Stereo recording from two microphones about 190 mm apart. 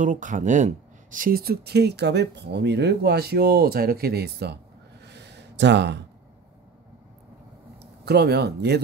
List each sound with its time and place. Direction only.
0.0 s speech: 40° right (ahead or behind); by 4.6 s 60° right (ahead or behind)
5.0 s a sound: 65° right (ahead or behind)
8.0 s speech: 60° right (ahead or behind)